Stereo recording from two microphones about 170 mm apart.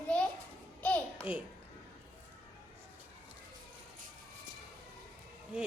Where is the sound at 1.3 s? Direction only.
10° right (ahead or behind).